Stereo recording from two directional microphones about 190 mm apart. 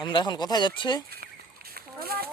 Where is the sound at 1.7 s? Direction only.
55° right (ahead or behind).